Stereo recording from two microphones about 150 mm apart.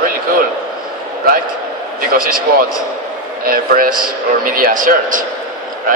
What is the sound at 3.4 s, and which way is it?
A man's voice, 75° right (ahead or behind).